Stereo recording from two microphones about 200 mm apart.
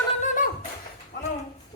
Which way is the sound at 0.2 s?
40° left (ahead or behind).